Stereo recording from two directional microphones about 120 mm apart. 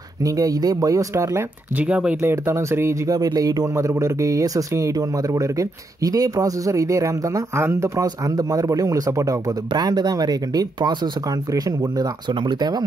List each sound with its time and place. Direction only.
0.2 s speech: 30° right (ahead or behind)
1.8 s speech: 10° right (ahead or behind)
2.4 s speech: 20° right (ahead or behind)